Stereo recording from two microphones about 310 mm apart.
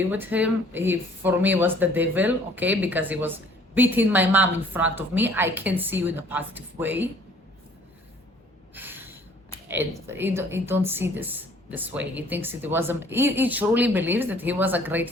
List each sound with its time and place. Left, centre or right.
0.1 s a woman's voice: centre
8.7 s a sound: centre
9.6 s speech: centre